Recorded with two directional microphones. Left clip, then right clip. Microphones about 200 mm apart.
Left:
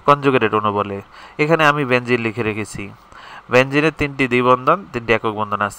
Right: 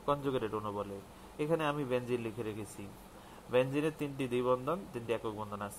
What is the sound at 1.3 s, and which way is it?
Speech, 20° left (ahead or behind).